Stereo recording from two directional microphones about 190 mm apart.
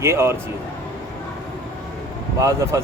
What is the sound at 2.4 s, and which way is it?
Speech, 15° right (ahead or behind).